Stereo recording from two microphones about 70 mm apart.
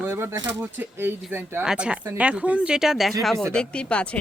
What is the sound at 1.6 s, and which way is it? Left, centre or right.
A woman's voice, centre.